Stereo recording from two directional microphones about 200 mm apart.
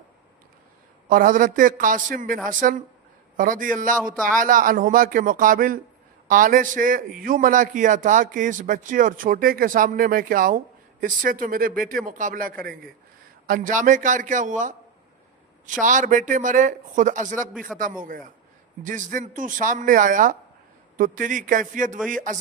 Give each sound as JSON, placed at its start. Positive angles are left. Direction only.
{"t": 1.1, "sound": "a man's voice", "side_deg": -45}
{"t": 15.8, "sound": "a man's voice", "side_deg": -40}